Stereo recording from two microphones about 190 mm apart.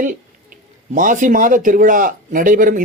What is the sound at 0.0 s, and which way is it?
A man's voice, 45° right (ahead or behind).